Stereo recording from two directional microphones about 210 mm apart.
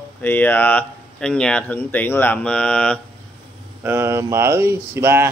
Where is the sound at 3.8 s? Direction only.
10° right (ahead or behind).